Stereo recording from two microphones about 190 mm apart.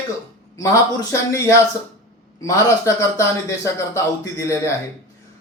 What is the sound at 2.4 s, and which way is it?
A man's voice, 15° left (ahead or behind).